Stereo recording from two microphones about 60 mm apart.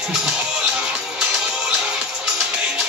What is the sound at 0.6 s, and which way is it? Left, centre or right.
Music, right.